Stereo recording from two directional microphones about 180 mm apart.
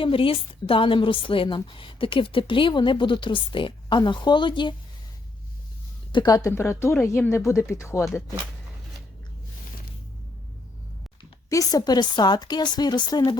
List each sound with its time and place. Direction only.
0.0 s a woman's voice: 30° left (ahead or behind)
6.1 s speech: 25° left (ahead or behind)
11.4 s a woman's voice: 20° left (ahead or behind)